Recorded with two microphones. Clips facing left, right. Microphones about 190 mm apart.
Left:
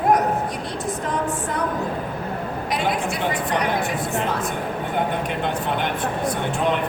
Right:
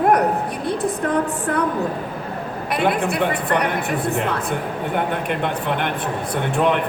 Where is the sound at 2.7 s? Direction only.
60° right (ahead or behind).